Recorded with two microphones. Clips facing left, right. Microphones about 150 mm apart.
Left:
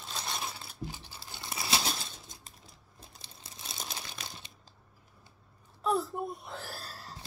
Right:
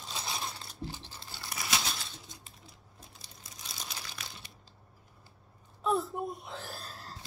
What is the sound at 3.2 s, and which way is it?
Crumpling, 30° left (ahead or behind).